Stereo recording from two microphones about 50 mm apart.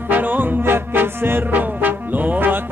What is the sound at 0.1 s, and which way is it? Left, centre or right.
Music, right.